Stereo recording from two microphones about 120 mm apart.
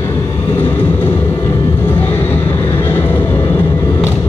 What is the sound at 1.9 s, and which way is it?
Vehicle, 15° left (ahead or behind).